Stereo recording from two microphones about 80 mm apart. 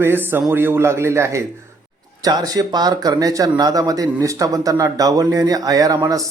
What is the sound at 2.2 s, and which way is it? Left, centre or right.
Speech, right.